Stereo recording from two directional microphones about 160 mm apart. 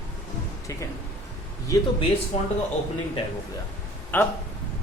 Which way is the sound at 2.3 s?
45° left (ahead or behind).